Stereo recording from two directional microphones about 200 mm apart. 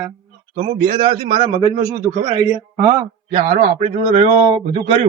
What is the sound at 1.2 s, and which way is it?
Speech, 35° right (ahead or behind).